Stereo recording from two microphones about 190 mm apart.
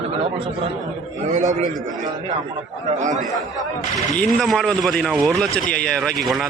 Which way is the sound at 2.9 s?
40° right (ahead or behind).